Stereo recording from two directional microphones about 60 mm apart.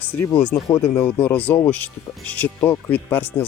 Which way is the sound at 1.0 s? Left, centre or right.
Left.